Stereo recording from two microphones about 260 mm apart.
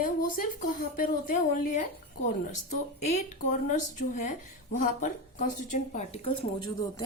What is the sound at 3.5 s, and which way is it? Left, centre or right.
A woman's voice, left.